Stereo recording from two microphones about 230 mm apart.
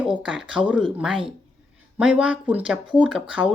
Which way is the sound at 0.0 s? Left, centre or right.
Centre.